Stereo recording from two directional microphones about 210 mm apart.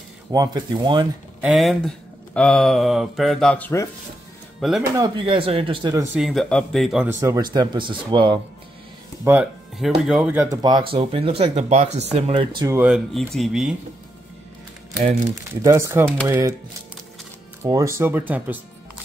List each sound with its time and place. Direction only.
0.3 s speech: 20° right (ahead or behind)
1.4 s speech: centre (ahead or behind)
4.6 s speech: centre (ahead or behind)
4.9 s speech: 20° right (ahead or behind)
6.1 s speech: centre (ahead or behind)
7.2 s speech: 15° right (ahead or behind)
9.2 s speech: 5° right (ahead or behind)
10.5 s speech: 20° right (ahead or behind); by 13.7 s centre (ahead or behind)
15.6 s speech: 15° right (ahead or behind)
17.6 s speech: 15° right (ahead or behind)